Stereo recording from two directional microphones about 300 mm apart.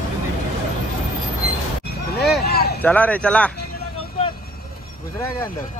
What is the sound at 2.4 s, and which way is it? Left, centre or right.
Vehicle, left.